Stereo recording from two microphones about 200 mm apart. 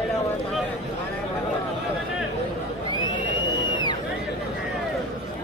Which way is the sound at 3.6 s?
20° left (ahead or behind).